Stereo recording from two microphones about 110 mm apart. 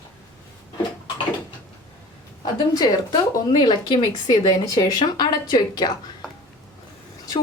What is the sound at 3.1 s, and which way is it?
Speech, 45° left (ahead or behind).